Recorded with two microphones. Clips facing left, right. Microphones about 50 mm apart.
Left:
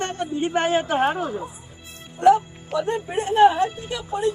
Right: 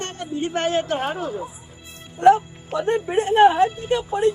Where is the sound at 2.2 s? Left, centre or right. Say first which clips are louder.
Right 1 dB; right.